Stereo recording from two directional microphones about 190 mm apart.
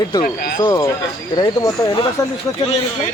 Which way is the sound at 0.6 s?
20° left (ahead or behind).